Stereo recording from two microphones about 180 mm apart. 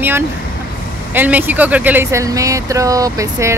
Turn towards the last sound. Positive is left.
turn(degrees=-20)  # may be behind; listen again after turning